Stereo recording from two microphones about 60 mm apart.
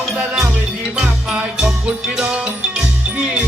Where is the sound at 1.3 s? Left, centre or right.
Centre.